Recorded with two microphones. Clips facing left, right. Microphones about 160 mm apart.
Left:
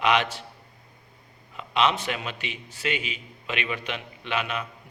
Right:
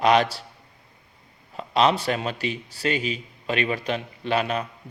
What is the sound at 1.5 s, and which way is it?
A man's voice, 35° right (ahead or behind).